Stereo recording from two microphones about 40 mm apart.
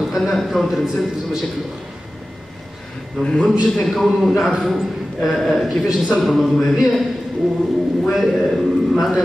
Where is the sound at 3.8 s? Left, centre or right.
Centre.